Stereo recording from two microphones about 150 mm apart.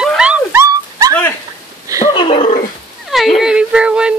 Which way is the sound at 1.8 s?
20° right (ahead or behind).